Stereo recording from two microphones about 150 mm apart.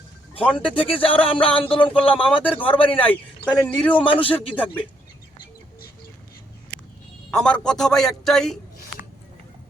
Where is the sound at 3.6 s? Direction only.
10° left (ahead or behind).